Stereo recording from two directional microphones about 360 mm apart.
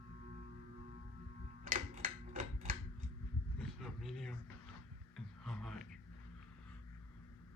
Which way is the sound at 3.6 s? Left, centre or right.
Centre.